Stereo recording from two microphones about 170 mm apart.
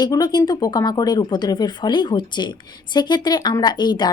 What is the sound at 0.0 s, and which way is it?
Speech, 25° left (ahead or behind).